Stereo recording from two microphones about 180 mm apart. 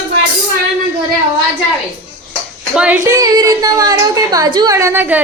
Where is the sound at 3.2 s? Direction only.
20° right (ahead or behind).